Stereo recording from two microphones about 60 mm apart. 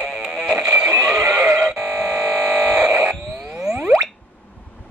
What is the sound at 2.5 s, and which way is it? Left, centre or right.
Buzzer, centre.